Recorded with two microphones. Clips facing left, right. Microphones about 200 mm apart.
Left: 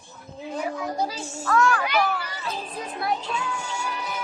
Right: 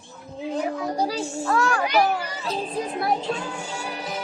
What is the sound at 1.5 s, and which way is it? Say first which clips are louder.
A child's voice: even; 30° right (ahead or behind).